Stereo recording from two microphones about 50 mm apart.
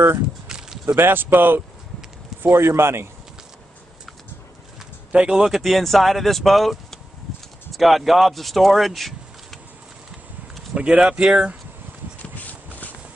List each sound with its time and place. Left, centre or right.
0.5 s a sound: centre
0.8 s speech: right
2.4 s speech: right
5.1 s speech: centre
5.4 s speech: centre
10.7 s speech: right
12.2 s a sound: left